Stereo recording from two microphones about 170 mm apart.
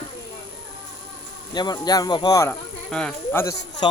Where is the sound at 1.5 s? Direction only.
25° left (ahead or behind).